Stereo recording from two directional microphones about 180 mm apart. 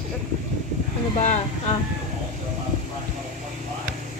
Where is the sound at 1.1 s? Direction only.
40° left (ahead or behind).